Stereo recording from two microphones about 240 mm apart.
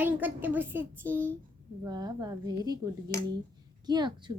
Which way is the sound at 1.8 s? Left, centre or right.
Centre.